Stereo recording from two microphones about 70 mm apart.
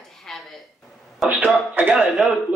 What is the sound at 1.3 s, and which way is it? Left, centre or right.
Speech, right.